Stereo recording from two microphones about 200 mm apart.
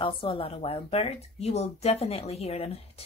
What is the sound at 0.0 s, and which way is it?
A woman's voice, 25° left (ahead or behind).